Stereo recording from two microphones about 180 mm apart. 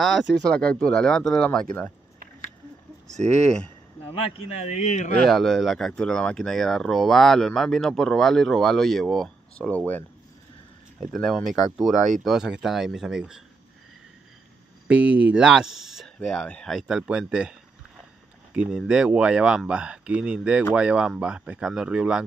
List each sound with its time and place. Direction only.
0.0 s speech: centre (ahead or behind)
3.4 s speech: 5° left (ahead or behind)
4.6 s speech: 40° left (ahead or behind)
5.2 s speech: centre (ahead or behind)
14.9 s speech: 5° right (ahead or behind)